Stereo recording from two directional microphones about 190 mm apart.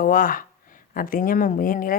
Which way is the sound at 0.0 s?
45° left (ahead or behind).